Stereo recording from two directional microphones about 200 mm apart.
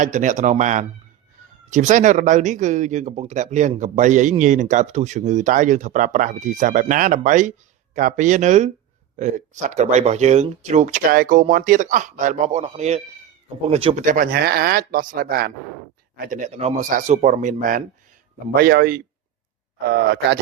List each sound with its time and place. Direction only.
0.0 s speech: 40° right (ahead or behind)
14.0 s speech: 40° right (ahead or behind)
16.1 s speech: 40° right (ahead or behind); by 20.4 s 55° right (ahead or behind)